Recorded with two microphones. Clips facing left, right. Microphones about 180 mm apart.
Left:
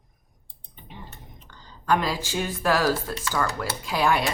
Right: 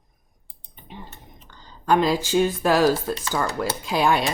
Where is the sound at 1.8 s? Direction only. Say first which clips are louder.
Right 5 dB; 20° right (ahead or behind).